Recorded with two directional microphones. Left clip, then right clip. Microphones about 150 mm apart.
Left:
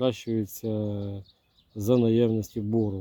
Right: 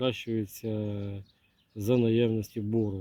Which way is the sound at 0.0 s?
45° left (ahead or behind).